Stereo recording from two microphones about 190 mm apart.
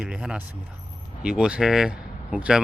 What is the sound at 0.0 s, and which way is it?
Speech, 5° right (ahead or behind).